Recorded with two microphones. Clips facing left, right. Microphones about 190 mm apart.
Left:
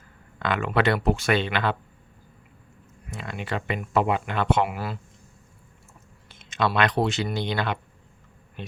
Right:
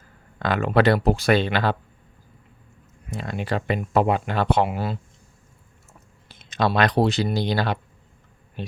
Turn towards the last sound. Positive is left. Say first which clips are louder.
# right 4 dB
turn(degrees=-35)  # may be behind; listen again after turning